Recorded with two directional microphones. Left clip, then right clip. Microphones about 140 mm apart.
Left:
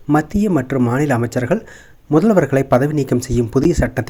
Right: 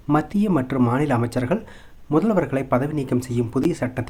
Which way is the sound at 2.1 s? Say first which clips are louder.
Left 7 dB; 35° left (ahead or behind).